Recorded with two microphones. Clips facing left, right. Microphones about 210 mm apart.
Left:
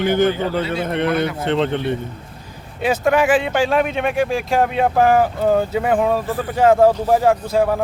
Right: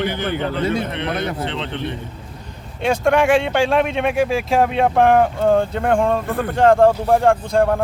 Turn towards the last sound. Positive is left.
turn(degrees=5)  # may be behind; listen again after turning